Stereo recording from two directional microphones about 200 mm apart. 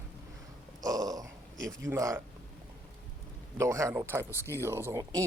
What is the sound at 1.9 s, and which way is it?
Speech, 15° right (ahead or behind).